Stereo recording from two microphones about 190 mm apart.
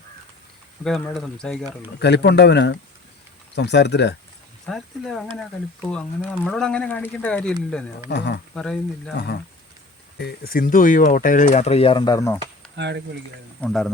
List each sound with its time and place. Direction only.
0.9 s speech: centre (ahead or behind)
2.0 s speech: 65° left (ahead or behind)
4.6 s speech: centre (ahead or behind)
8.0 s speech: 65° left (ahead or behind)
8.5 s speech: 5° left (ahead or behind)
9.1 s speech: 60° left (ahead or behind); by 12.7 s 15° left (ahead or behind)
12.7 s speech: 65° right (ahead or behind)
13.6 s speech: centre (ahead or behind)